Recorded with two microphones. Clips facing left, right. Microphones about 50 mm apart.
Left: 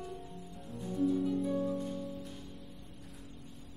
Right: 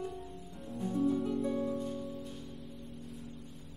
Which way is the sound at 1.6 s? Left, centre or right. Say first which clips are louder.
Even; centre.